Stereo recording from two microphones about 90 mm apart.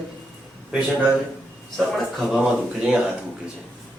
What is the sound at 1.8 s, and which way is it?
Speech, centre (ahead or behind).